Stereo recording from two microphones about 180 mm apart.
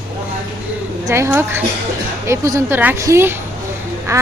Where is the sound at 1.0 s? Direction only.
15° right (ahead or behind).